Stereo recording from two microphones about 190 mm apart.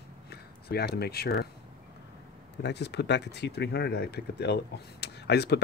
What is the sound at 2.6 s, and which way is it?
Speech, 60° left (ahead or behind).